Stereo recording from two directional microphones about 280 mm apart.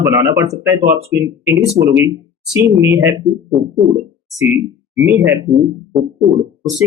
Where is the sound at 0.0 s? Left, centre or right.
Centre.